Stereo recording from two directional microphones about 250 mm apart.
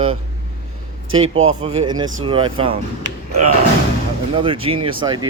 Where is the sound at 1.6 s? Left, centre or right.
Right.